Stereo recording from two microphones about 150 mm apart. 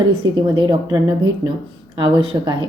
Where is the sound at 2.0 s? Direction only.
30° right (ahead or behind).